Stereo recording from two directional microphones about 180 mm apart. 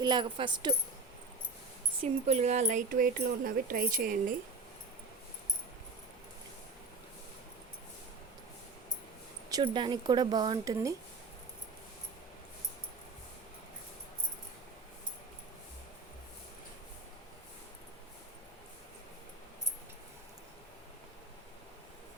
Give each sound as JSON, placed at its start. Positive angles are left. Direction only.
{"t": 0.0, "sound": "a woman's voice", "side_deg": -25}
{"t": 2.0, "sound": "speech", "side_deg": -35}
{"t": 9.5, "sound": "a woman's voice", "side_deg": -25}